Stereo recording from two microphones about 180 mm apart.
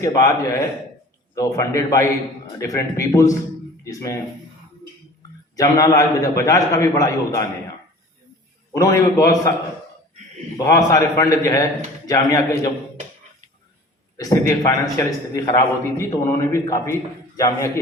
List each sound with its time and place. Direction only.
0.0 s a man's voice: 15° left (ahead or behind)
5.5 s a man's voice: 20° left (ahead or behind)
8.7 s a man's voice: 20° left (ahead or behind)
10.6 s a man's voice: 20° left (ahead or behind)
14.2 s a man's voice: 20° left (ahead or behind)